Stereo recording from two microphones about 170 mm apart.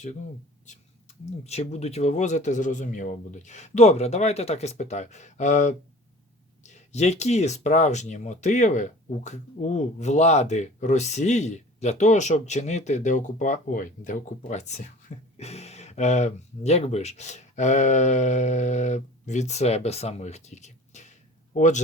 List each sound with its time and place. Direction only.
1.2 s a man's voice: 40° left (ahead or behind)